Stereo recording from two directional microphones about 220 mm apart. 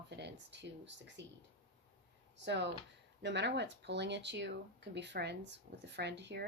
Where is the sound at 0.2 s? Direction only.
50° right (ahead or behind).